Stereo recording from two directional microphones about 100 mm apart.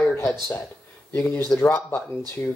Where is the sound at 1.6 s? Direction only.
20° left (ahead or behind).